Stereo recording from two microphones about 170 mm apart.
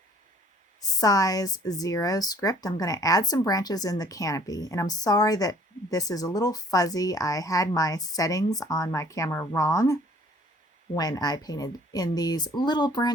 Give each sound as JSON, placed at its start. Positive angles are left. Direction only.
{"t": 0.8, "sound": "speech", "side_deg": 20}